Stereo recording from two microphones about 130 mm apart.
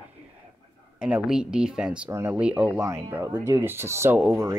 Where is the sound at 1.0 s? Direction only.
5° right (ahead or behind).